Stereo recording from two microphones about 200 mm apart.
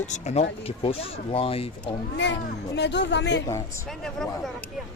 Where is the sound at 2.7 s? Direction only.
60° left (ahead or behind).